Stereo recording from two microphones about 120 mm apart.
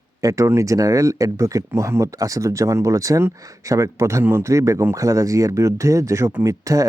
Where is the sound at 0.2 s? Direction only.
25° right (ahead or behind).